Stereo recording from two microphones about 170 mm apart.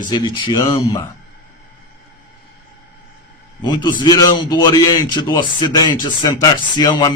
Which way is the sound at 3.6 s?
25° left (ahead or behind).